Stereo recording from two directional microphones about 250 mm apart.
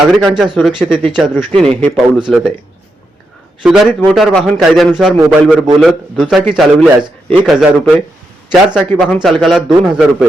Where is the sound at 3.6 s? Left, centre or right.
Centre.